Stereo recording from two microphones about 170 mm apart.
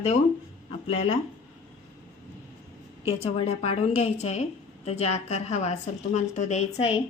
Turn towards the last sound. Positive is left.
turn(degrees=35)  # may be behind; listen again after turning